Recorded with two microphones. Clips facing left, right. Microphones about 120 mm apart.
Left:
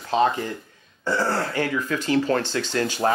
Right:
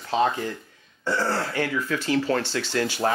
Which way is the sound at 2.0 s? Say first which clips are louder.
Left 3 dB; 40° left (ahead or behind).